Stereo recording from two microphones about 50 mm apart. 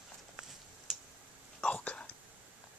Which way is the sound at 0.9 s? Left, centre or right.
Centre.